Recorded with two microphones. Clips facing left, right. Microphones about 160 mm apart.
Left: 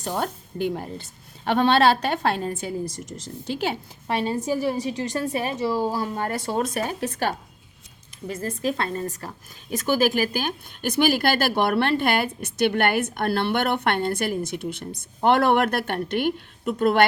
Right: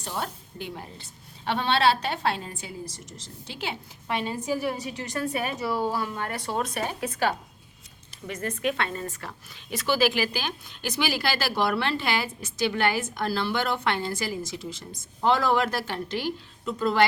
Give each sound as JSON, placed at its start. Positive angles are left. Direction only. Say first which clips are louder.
{"t": 0.0, "sound": "a woman's voice", "louder": "left 6 dB", "side_deg": 45}